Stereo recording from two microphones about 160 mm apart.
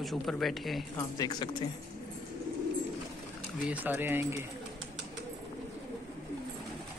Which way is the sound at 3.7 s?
10° right (ahead or behind).